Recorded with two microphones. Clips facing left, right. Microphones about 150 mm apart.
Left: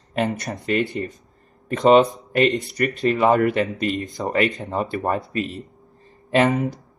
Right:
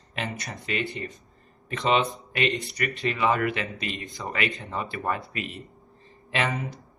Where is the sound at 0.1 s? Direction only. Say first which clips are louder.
Left 10 dB; 45° left (ahead or behind).